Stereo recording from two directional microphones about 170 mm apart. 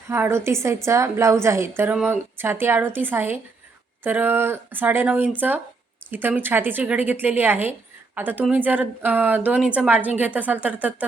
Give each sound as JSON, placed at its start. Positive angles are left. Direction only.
{"t": 0.1, "sound": "a woman's voice", "side_deg": -15}